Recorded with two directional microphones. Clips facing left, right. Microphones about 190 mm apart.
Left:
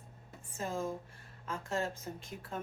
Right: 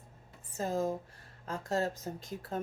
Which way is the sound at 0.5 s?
40° right (ahead or behind).